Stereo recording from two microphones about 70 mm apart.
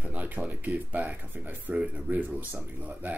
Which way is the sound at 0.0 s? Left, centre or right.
Right.